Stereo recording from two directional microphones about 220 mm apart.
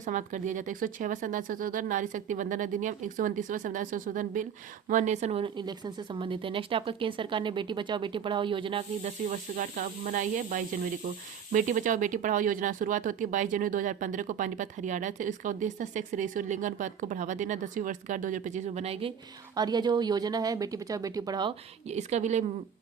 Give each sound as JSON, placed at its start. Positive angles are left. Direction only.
{"t": 0.0, "sound": "a woman's voice", "side_deg": -35}